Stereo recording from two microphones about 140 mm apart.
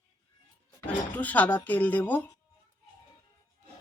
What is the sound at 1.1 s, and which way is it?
Speech, 10° left (ahead or behind).